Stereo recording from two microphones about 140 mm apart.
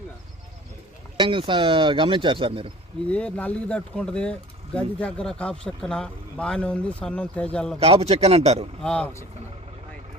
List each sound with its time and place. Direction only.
1.1 s speech: 35° right (ahead or behind)
3.1 s speech: 10° left (ahead or behind)
7.8 s speech: 45° right (ahead or behind)
8.8 s speech: 5° left (ahead or behind)